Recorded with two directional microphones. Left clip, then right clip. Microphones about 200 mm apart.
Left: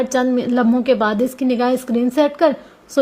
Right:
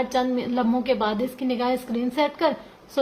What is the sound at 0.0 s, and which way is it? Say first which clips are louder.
A woman's voice: left 6 dB; 35° left (ahead or behind).